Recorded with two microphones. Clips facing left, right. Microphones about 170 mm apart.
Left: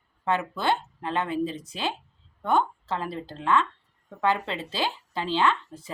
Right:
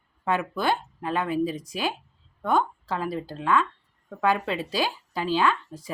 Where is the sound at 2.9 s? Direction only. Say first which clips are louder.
Right 3 dB; 10° right (ahead or behind).